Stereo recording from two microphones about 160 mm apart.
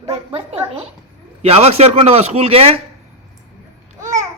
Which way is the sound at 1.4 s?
40° right (ahead or behind).